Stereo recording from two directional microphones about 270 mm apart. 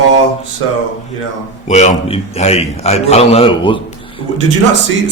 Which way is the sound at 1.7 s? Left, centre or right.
Left.